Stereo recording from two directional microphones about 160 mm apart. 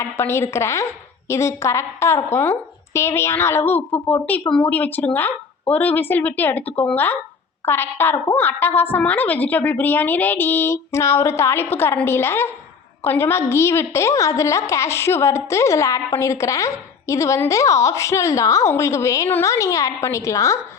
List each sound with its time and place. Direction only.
0.0 s a woman's voice: 15° left (ahead or behind)